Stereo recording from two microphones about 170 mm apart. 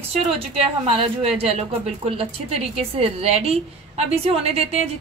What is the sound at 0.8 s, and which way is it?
A woman's voice, 35° right (ahead or behind).